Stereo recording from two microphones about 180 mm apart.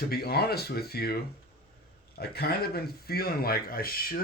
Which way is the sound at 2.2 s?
60° left (ahead or behind).